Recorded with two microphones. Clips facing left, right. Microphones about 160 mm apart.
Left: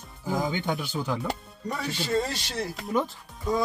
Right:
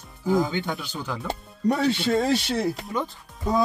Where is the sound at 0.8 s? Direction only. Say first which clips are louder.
Left 3 dB; 10° left (ahead or behind).